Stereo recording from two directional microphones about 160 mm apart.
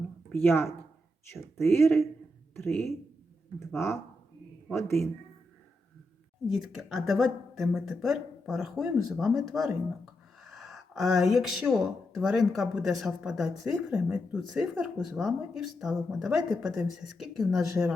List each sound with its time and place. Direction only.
0.3 s speech: 15° left (ahead or behind)
1.7 s speech: 15° left (ahead or behind)
3.8 s speech: 15° left (ahead or behind)
6.5 s speech: centre (ahead or behind)
10.4 s a sound: centre (ahead or behind)
12.1 s speech: centre (ahead or behind)